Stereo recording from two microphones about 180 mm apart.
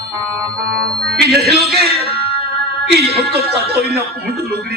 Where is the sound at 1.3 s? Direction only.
60° right (ahead or behind).